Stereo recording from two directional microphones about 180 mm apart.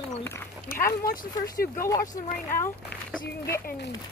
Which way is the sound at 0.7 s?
55° left (ahead or behind).